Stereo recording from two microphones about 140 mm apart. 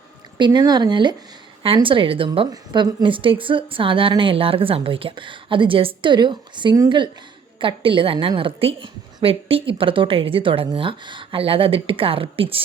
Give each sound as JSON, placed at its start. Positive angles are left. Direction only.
{"t": 0.3, "sound": "a woman's voice", "side_deg": -30}